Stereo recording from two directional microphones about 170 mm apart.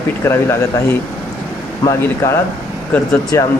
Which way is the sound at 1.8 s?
20° left (ahead or behind).